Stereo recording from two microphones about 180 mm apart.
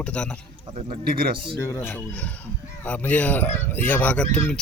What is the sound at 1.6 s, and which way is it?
Speech, 15° left (ahead or behind).